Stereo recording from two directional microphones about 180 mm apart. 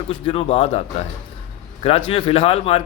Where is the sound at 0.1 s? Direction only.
30° left (ahead or behind).